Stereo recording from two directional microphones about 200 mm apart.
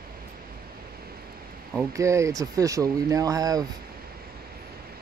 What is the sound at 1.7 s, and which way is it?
Speech, 15° right (ahead or behind).